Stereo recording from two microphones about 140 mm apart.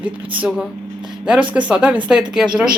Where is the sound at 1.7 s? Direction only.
5° right (ahead or behind).